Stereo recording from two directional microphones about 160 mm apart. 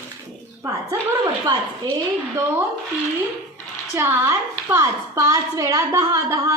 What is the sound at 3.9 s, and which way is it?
A woman's voice, 15° right (ahead or behind).